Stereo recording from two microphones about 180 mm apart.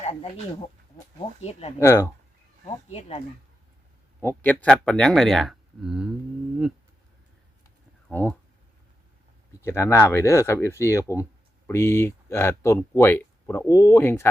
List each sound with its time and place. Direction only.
0.0 s a sound: 35° left (ahead or behind)
1.8 s speech: 15° left (ahead or behind)
2.6 s speech: 35° left (ahead or behind)
4.2 s speech: 10° left (ahead or behind)
8.1 s speech: 10° left (ahead or behind)
9.6 s speech: 15° left (ahead or behind)